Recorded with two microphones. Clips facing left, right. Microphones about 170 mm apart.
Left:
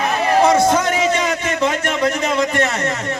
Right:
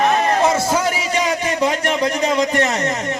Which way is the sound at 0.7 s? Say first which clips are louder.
Left 3 dB; 10° right (ahead or behind).